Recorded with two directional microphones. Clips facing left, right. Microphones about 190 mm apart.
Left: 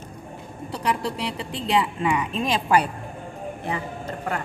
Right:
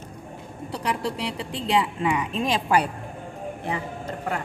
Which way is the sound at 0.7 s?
30° right (ahead or behind).